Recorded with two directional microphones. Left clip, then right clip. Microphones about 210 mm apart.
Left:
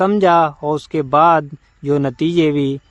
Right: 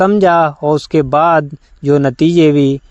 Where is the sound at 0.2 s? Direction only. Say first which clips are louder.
Right 3 dB; 20° right (ahead or behind).